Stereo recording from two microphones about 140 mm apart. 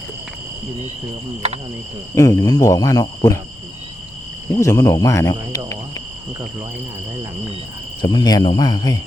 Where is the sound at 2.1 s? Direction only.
25° left (ahead or behind).